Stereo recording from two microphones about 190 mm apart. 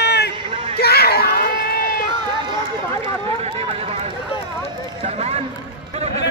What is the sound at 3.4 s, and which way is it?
Run, 30° right (ahead or behind).